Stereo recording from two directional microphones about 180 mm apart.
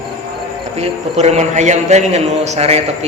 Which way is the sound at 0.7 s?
35° right (ahead or behind).